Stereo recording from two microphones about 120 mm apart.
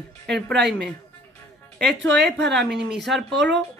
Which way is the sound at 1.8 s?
5° left (ahead or behind).